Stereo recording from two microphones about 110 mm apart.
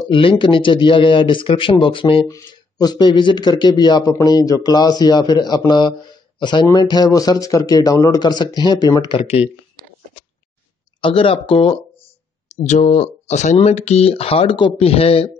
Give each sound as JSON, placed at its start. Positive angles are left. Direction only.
{"t": 0.1, "sound": "speech", "side_deg": 50}
{"t": 2.2, "sound": "speech", "side_deg": 35}
{"t": 11.0, "sound": "speech", "side_deg": 55}
{"t": 12.6, "sound": "speech", "side_deg": 90}